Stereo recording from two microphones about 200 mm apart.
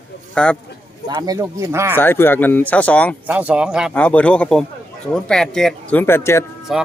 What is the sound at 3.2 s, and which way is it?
Speech, 5° right (ahead or behind).